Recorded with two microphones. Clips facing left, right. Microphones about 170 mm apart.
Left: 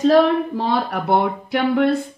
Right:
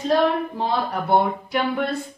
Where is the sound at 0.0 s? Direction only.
80° left.